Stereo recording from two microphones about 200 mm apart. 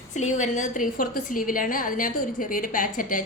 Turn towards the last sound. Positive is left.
turn(degrees=40)  # may be behind; listen again after turning